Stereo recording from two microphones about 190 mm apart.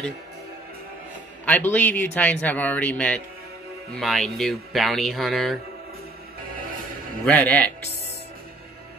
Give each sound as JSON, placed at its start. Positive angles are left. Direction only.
{"t": 1.4, "sound": "a man's voice", "side_deg": 10}
{"t": 6.5, "sound": "music", "side_deg": -45}
{"t": 7.2, "sound": "a man's voice", "side_deg": 10}